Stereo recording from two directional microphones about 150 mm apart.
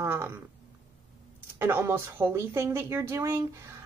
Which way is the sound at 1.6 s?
15° right (ahead or behind).